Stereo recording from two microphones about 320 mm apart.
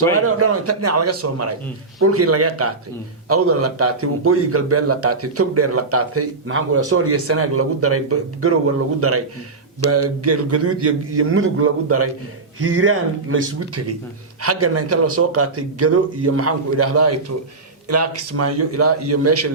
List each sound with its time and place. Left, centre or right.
0.1 s a man's voice: right